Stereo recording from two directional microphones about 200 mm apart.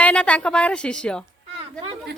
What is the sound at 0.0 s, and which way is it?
A woman's voice, 5° left (ahead or behind).